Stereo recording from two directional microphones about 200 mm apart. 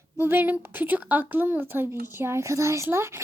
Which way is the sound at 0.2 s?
10° right (ahead or behind).